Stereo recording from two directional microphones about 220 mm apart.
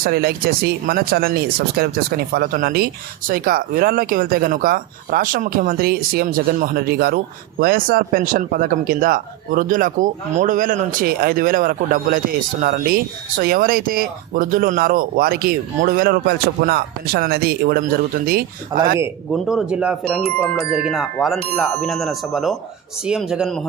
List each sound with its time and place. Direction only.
0.0 s speech: 45° right (ahead or behind)
18.7 s speech: 15° right (ahead or behind)
19.3 s speech: centre (ahead or behind)